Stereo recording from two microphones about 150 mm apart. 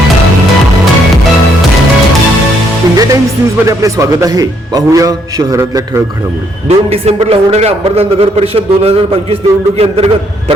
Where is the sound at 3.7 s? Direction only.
20° right (ahead or behind).